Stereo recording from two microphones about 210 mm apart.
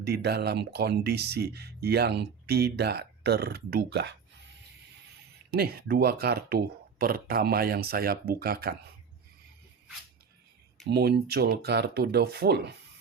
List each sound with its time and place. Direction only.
0.0 s speech: 50° right (ahead or behind)
5.5 s speech: 45° right (ahead or behind)
10.8 s speech: 50° right (ahead or behind)